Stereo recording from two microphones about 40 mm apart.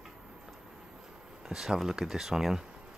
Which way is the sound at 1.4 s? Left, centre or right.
Centre.